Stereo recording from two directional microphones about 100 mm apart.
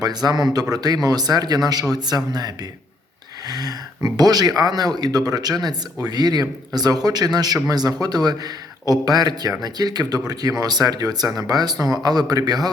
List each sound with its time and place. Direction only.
0.0 s speech: 40° right (ahead or behind)